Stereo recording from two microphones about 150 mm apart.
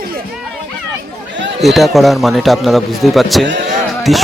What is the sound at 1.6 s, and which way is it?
Speech, centre (ahead or behind).